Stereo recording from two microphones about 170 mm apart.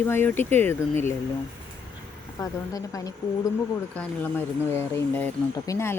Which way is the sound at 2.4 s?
20° left (ahead or behind).